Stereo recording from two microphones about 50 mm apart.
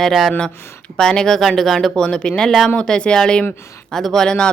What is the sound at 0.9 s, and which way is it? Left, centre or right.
Speech, centre.